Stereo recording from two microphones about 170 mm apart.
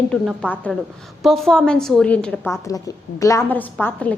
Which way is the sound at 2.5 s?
20° left (ahead or behind).